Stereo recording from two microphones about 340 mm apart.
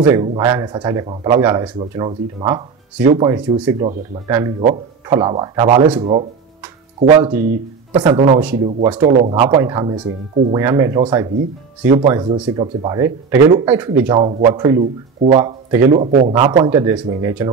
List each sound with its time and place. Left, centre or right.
0.1 s a man's voice: centre